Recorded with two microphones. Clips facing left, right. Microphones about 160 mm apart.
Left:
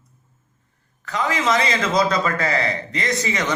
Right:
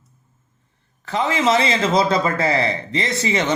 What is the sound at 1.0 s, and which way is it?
A man's voice, 25° right (ahead or behind).